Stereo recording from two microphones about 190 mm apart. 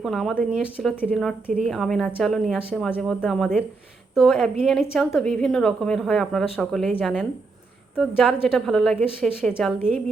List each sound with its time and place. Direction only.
0.0 s a woman's voice: centre (ahead or behind)